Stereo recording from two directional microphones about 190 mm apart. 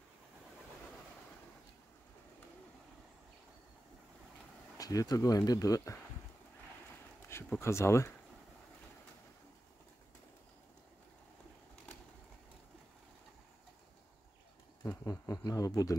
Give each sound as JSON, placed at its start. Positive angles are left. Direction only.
{"t": 4.7, "sound": "speech", "side_deg": 20}
{"t": 7.2, "sound": "speech", "side_deg": 10}
{"t": 14.8, "sound": "speech", "side_deg": 15}